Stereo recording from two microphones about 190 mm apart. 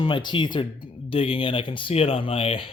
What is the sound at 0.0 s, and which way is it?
Speech, 25° left (ahead or behind).